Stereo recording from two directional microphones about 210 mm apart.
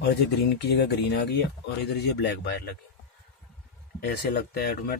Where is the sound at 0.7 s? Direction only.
50° left (ahead or behind).